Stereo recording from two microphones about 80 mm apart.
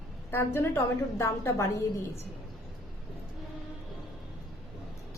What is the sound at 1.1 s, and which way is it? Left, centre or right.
Speech, left.